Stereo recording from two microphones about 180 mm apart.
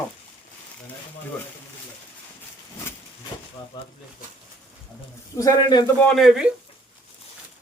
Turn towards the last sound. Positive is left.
turn(degrees=-5)  # may be behind; listen again after turning